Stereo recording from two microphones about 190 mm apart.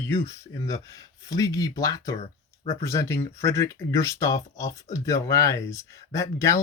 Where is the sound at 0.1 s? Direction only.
15° left (ahead or behind).